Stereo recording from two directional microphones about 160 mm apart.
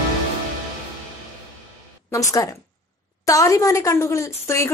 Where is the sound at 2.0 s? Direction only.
20° left (ahead or behind).